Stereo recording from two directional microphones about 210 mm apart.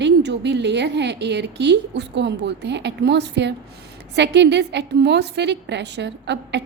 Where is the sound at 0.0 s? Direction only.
55° right (ahead or behind).